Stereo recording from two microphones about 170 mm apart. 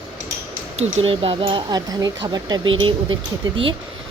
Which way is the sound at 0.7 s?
35° right (ahead or behind).